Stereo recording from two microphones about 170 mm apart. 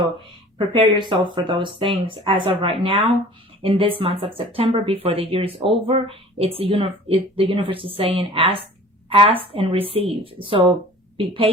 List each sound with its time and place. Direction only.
0.7 s a woman's voice: 30° right (ahead or behind)